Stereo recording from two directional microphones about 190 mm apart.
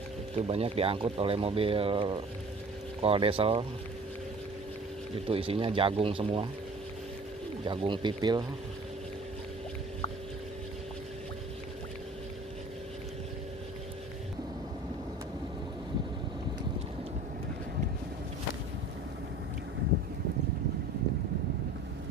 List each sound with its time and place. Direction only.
0.4 s speech: 30° right (ahead or behind)
5.1 s speech: 30° right (ahead or behind)
7.6 s speech: 25° right (ahead or behind)